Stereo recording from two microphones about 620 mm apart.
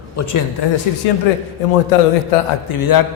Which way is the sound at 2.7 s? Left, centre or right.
Left.